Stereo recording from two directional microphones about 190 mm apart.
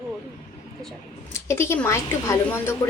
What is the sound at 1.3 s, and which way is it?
A woman's voice, 15° left (ahead or behind).